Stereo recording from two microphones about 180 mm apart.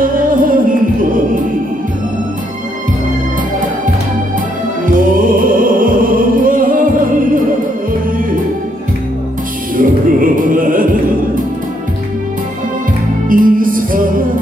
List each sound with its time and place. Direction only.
0.0 s music: 50° right (ahead or behind)
5.1 s music: 50° right (ahead or behind)
9.8 s music: 50° right (ahead or behind)
13.3 s music: 50° right (ahead or behind)